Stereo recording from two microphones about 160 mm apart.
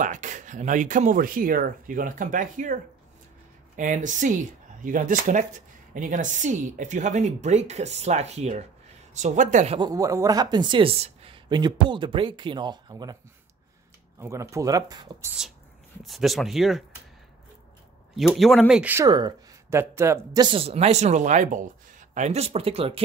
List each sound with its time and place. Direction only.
0.0 s speech: 50° right (ahead or behind)
9.8 s a woman's voice: 25° right (ahead or behind)
14.2 s a woman's voice: 20° right (ahead or behind)
16.0 s speech: centre (ahead or behind)
18.1 s speech: centre (ahead or behind)
19.0 s speech: 25° right (ahead or behind)
20.4 s speech: 35° right (ahead or behind)